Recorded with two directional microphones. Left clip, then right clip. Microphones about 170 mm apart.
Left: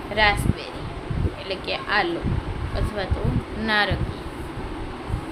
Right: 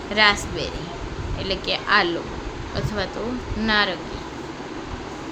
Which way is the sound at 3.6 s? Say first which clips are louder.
Right 1 dB; 5° right (ahead or behind).